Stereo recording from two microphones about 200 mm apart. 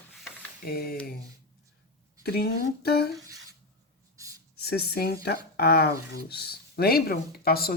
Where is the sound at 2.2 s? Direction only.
50° left (ahead or behind).